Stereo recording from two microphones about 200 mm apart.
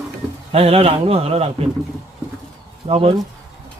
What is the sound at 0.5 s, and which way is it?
Speech, 30° right (ahead or behind).